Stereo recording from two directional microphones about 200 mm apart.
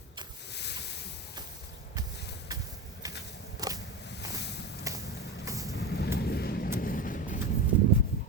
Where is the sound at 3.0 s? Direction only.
15° right (ahead or behind).